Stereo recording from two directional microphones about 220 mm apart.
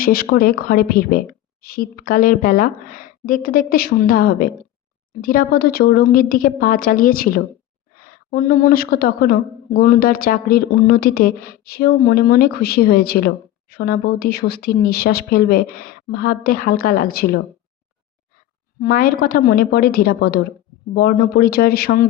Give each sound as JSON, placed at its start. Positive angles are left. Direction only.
{"t": 0.0, "sound": "a woman's voice", "side_deg": 40}
{"t": 18.8, "sound": "a woman's voice", "side_deg": 40}